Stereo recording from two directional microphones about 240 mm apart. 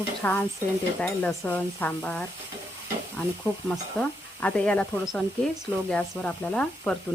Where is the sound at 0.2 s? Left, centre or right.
Centre.